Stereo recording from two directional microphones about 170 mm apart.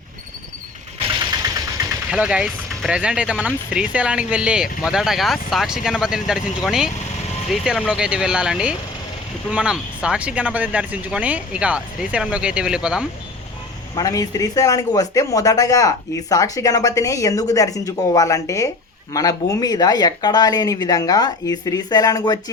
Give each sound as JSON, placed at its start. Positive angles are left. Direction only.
{"t": 2.0, "sound": "speech", "side_deg": -5}
{"t": 13.9, "sound": "speech", "side_deg": 20}